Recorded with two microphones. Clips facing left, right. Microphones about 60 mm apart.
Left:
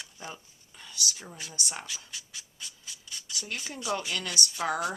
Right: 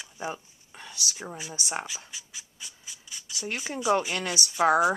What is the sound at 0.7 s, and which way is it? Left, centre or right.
Whispering, right.